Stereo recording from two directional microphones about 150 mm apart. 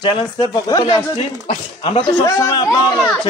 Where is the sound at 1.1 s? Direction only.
40° left (ahead or behind).